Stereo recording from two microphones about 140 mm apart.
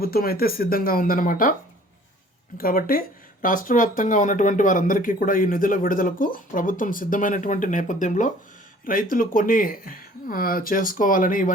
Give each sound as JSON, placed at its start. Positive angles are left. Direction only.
{"t": 0.0, "sound": "speech", "side_deg": 90}
{"t": 2.6, "sound": "speech", "side_deg": 90}
{"t": 8.8, "sound": "speech", "side_deg": 85}